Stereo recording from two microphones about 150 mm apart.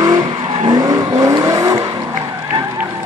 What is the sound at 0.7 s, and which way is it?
Vehicle, 25° right (ahead or behind).